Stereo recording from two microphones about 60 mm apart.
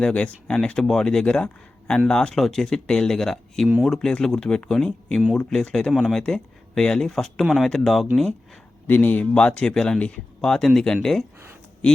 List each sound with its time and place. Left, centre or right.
0.0 s speech: centre
8.9 s speech: left
9.3 s speech: centre